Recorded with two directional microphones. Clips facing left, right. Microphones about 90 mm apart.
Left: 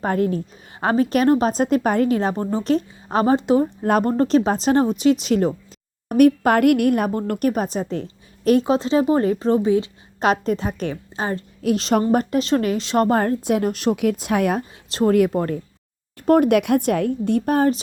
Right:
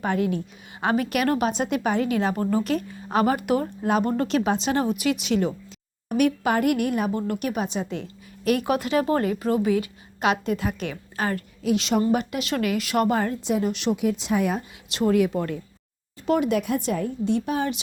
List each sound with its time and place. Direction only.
0.0 s a woman's voice: 40° left (ahead or behind); by 3.7 s 25° left (ahead or behind)
3.8 s speech: 50° left (ahead or behind)
4.2 s a woman's voice: 35° left (ahead or behind)
8.4 s speech: 25° left (ahead or behind)
9.2 s a woman's voice: 30° left (ahead or behind)
13.1 s speech: 50° left (ahead or behind)
13.9 s a woman's voice: 60° left (ahead or behind)
14.8 s a woman's voice: 35° left (ahead or behind)
16.6 s a woman's voice: 65° left (ahead or behind)